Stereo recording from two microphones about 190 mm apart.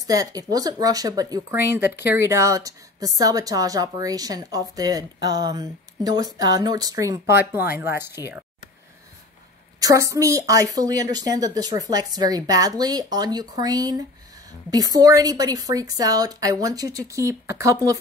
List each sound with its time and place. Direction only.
0.0 s a woman's voice: 20° right (ahead or behind)
9.8 s a woman's voice: 15° right (ahead or behind)